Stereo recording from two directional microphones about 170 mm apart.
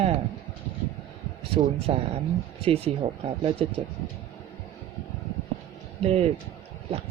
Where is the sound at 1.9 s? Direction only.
40° right (ahead or behind).